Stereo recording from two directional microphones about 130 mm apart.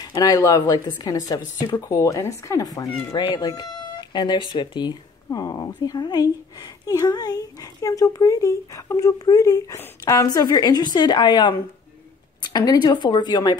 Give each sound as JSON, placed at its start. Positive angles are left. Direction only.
{"t": 0.1, "sound": "speech", "side_deg": 30}